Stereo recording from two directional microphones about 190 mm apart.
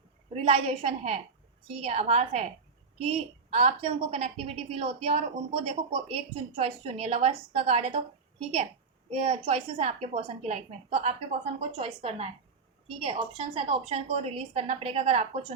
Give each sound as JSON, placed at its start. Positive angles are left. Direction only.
{"t": 0.3, "sound": "a woman's voice", "side_deg": -30}
{"t": 9.0, "sound": "a woman's voice", "side_deg": -30}